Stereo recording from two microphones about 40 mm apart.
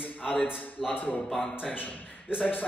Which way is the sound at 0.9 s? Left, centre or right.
Left.